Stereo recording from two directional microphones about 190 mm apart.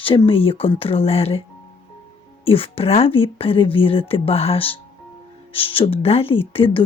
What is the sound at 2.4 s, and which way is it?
Speech, 30° left (ahead or behind).